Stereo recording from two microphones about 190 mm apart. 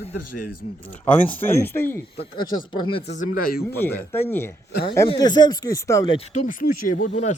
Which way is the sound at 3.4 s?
50° left (ahead or behind).